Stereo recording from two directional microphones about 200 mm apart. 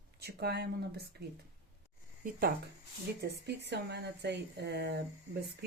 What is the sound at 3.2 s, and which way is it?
Speech, 55° right (ahead or behind).